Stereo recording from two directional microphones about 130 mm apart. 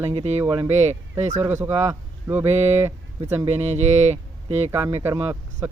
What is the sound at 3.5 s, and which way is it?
Speech, 55° right (ahead or behind).